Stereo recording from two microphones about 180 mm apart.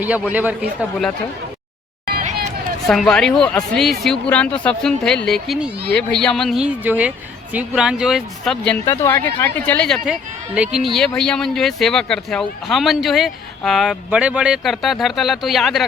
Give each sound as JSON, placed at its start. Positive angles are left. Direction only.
{"t": 0.0, "sound": "a man's voice", "side_deg": -10}
{"t": 2.0, "sound": "a sound", "side_deg": -55}
{"t": 2.8, "sound": "speech", "side_deg": 0}